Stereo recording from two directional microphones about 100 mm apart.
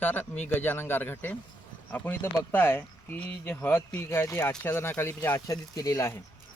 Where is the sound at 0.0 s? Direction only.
20° left (ahead or behind).